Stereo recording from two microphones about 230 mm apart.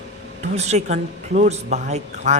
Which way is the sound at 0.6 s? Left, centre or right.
Right.